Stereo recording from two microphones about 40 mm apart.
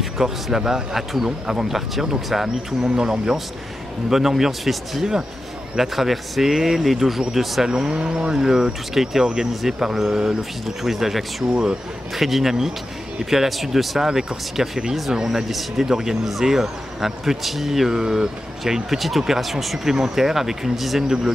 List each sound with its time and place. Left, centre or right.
0.0 s a man's voice: centre
7.6 s speech: centre
8.0 s speech: right
8.3 s speech: centre